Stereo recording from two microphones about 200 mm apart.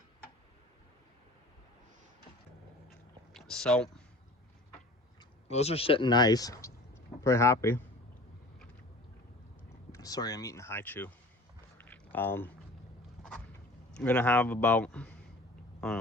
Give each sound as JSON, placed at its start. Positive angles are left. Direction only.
{"t": 3.3, "sound": "speech", "side_deg": 5}
{"t": 5.5, "sound": "speech", "side_deg": 30}
{"t": 9.9, "sound": "speech", "side_deg": 20}
{"t": 11.8, "sound": "biting", "side_deg": 10}
{"t": 13.9, "sound": "speech", "side_deg": 5}